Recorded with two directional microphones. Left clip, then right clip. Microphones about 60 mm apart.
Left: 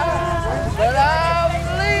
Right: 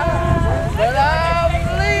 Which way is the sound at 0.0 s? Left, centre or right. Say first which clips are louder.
Right 1 dB; left.